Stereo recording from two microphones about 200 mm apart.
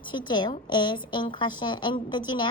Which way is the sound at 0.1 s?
25° left (ahead or behind).